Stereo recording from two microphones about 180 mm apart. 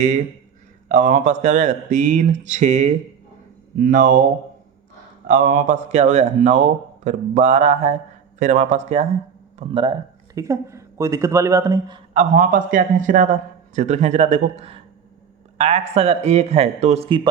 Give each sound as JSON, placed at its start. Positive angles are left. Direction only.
{"t": 0.9, "sound": "speech", "side_deg": -45}
{"t": 5.2, "sound": "speech", "side_deg": -45}
{"t": 9.6, "sound": "speech", "side_deg": -25}
{"t": 12.1, "sound": "speech", "side_deg": -45}